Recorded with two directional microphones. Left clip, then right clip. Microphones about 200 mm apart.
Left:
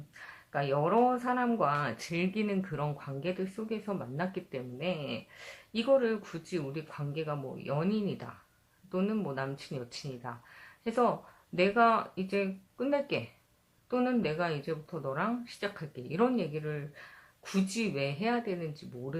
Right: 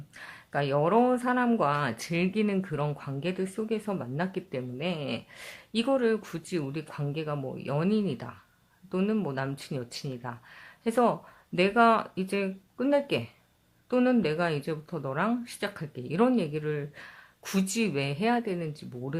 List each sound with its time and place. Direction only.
0.2 s speech: 35° right (ahead or behind)